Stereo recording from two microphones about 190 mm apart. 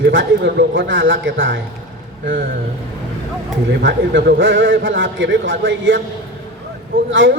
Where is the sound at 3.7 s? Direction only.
65° right (ahead or behind).